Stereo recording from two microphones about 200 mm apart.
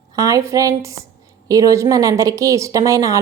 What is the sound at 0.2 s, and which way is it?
A woman's voice, 15° right (ahead or behind).